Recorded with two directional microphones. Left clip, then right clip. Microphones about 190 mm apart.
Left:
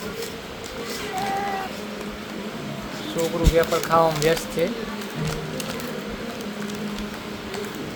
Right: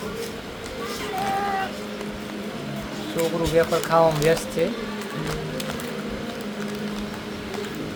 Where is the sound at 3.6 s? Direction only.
5° left (ahead or behind).